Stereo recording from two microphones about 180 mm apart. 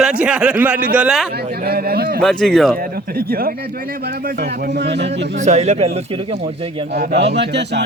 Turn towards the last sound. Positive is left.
turn(degrees=-70)  # may be behind; listen again after turning